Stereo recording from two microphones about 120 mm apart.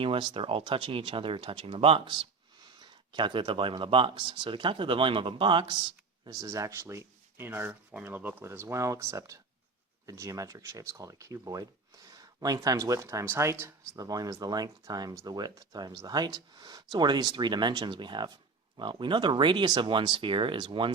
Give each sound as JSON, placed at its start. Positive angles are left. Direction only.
{"t": 0.0, "sound": "speech", "side_deg": -50}
{"t": 6.2, "sound": "speech", "side_deg": -30}